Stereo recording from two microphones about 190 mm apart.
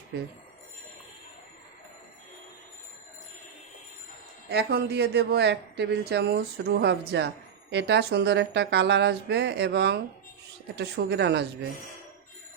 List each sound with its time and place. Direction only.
4.4 s speech: 60° right (ahead or behind)